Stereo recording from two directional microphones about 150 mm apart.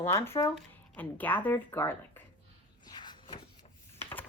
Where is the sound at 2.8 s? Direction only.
30° left (ahead or behind).